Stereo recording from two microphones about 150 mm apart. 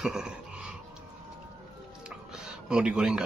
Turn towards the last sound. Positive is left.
turn(degrees=-5)  # may be behind; listen again after turning